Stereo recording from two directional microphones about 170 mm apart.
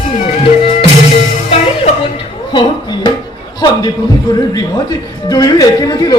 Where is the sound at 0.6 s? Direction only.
35° left (ahead or behind).